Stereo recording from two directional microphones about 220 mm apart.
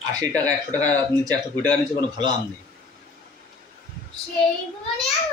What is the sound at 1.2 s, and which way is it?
Speech, 5° left (ahead or behind).